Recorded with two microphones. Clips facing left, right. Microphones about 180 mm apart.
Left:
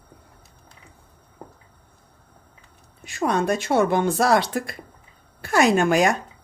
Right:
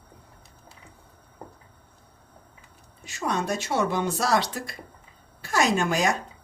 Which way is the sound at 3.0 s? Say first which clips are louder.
Left 6 dB; 55° left (ahead or behind).